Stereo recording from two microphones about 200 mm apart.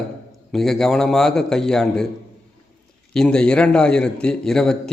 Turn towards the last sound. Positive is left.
turn(degrees=5)  # may be behind; listen again after turning